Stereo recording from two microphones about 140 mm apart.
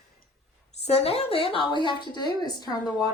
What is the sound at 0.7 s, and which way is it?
A woman's voice, 50° left (ahead or behind).